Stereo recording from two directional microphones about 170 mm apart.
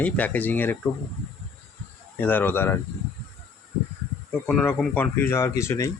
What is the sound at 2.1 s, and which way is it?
Speech, 10° left (ahead or behind).